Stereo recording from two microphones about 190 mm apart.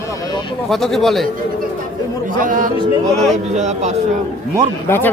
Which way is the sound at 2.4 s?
45° right (ahead or behind).